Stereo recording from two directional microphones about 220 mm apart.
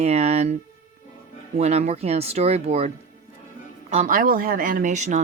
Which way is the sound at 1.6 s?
30° right (ahead or behind).